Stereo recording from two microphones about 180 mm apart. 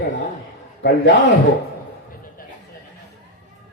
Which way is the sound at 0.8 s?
80° left.